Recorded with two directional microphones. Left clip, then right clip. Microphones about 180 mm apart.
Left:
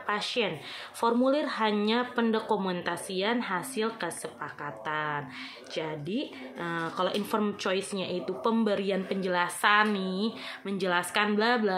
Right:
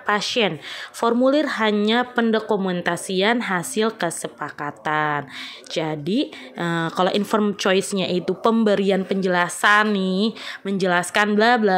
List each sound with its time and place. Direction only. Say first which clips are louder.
0.0 s speech: right 9 dB; 45° right (ahead or behind)